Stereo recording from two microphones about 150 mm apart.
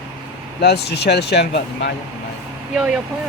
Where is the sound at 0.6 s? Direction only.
90° left.